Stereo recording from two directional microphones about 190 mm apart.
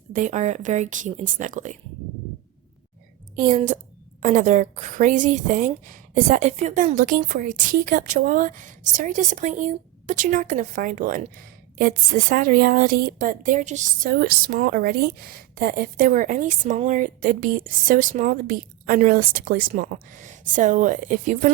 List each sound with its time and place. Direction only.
0.1 s speech: 40° right (ahead or behind)
3.3 s a woman's voice: 45° right (ahead or behind)